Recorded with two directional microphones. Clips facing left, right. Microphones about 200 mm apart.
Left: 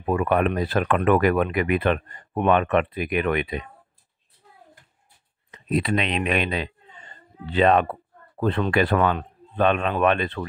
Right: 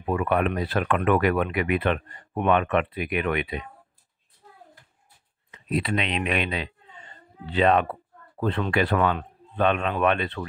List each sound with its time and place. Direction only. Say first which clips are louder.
0.0 s speech: left 2 dB; 45° left (ahead or behind)
5.5 s speech: left 3 dB; 45° left (ahead or behind)